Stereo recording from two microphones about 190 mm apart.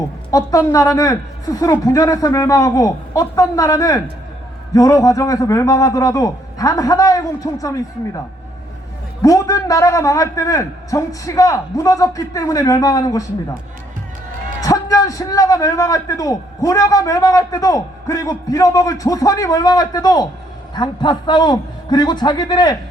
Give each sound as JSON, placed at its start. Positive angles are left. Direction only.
{"t": 0.3, "sound": "a man's voice", "side_deg": 20}
{"t": 9.2, "sound": "a man's voice", "side_deg": 15}
{"t": 14.6, "sound": "a man's voice", "side_deg": 15}